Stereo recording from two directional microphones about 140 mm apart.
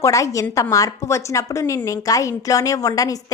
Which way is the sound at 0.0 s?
25° left (ahead or behind).